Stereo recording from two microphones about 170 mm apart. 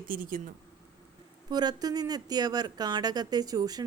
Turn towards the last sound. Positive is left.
turn(degrees=-20)  # may be behind; listen again after turning